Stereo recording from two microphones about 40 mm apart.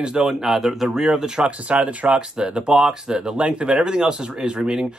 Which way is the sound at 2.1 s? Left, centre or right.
Centre.